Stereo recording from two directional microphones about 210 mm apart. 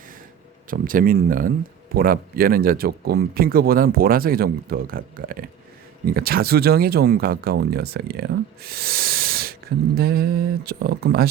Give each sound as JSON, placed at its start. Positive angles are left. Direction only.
{"t": 0.7, "sound": "speech", "side_deg": -40}
{"t": 8.6, "sound": "a sound", "side_deg": -45}
{"t": 10.7, "sound": "speech", "side_deg": -50}